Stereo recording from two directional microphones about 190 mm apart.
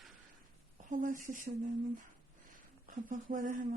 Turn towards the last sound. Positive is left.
turn(degrees=-45)  # may be behind; listen again after turning